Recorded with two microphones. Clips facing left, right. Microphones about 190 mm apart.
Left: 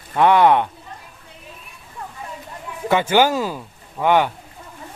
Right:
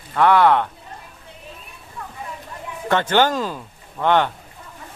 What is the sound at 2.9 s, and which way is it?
Speech, 10° left (ahead or behind).